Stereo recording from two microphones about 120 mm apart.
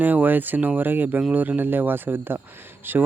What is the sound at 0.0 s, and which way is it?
Speech, 15° right (ahead or behind).